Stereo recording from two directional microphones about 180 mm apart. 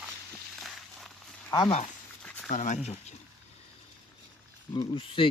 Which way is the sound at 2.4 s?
45° left (ahead or behind).